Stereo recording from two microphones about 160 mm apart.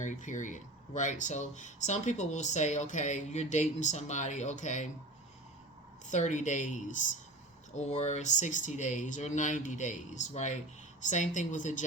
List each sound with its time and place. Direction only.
0.0 s speech: 50° left (ahead or behind)
6.1 s speech: 50° left (ahead or behind)
7.7 s speech: 45° left (ahead or behind)